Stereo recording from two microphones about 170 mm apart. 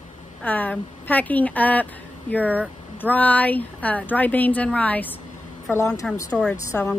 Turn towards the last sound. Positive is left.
turn(degrees=10)  # may be behind; listen again after turning